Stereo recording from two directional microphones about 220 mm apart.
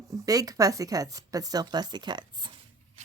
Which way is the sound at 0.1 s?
15° right (ahead or behind).